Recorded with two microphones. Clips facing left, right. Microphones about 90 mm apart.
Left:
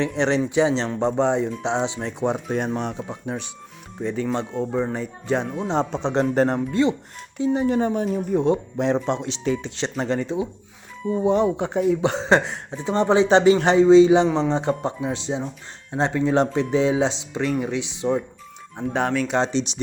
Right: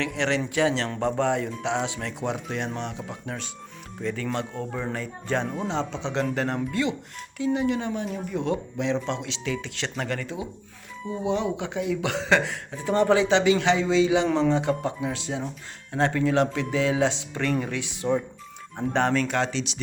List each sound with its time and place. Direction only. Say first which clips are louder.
0.2 s speech: left 4 dB; 30° left (ahead or behind)
3.1 s speech: left 5 dB; 20° left (ahead or behind)
5.6 s speech: left 5 dB; 40° left (ahead or behind)
11.2 s speech: left 6 dB; 40° left (ahead or behind); by 16.3 s 20° left (ahead or behind)
16.3 s speech: left 4 dB; 35° left (ahead or behind)
16.9 s speech: left 2 dB; 20° left (ahead or behind)
18.9 s speech: left 1 dB; 5° left (ahead or behind)
19.3 s speech: left 4 dB; 25° left (ahead or behind)